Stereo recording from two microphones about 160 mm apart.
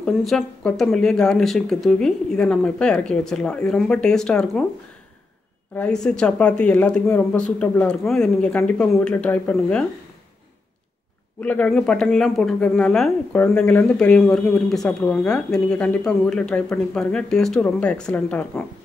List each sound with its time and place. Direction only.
0.0 s speech: centre (ahead or behind)
5.8 s speech: 5° left (ahead or behind)
11.4 s speech: 10° left (ahead or behind)